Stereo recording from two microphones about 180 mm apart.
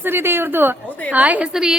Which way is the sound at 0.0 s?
10° right (ahead or behind).